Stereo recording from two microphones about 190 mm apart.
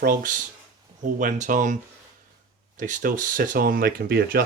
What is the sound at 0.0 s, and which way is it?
Speech, 50° right (ahead or behind).